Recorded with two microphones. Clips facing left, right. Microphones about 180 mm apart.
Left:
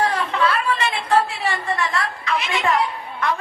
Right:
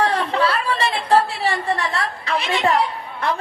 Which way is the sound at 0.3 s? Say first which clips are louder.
Right 1 dB; 35° right (ahead or behind).